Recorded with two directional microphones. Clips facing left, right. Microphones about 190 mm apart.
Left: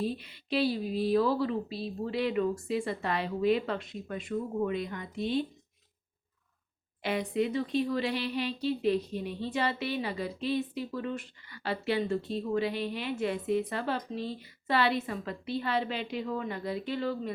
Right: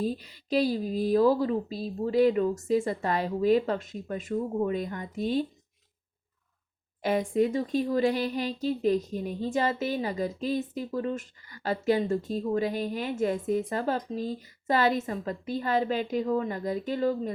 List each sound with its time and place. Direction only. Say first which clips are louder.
0.0 s speech: right 3 dB; 40° right (ahead or behind)
7.0 s speech: right 5 dB; 45° right (ahead or behind)